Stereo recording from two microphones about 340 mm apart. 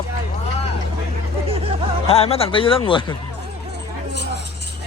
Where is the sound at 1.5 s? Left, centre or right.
Centre.